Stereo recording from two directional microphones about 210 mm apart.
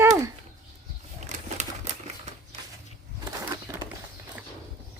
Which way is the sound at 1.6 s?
35° right (ahead or behind).